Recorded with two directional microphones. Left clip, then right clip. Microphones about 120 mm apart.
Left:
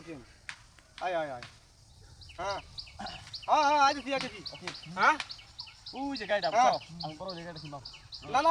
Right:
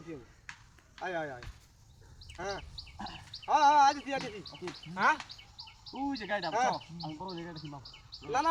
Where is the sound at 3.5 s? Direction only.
45° right (ahead or behind).